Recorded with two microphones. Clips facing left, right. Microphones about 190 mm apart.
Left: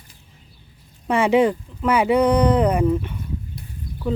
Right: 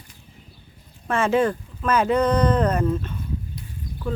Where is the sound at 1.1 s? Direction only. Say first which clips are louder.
Left 3 dB; 15° left (ahead or behind).